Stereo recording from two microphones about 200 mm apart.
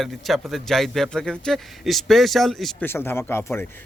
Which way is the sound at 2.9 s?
10° left (ahead or behind).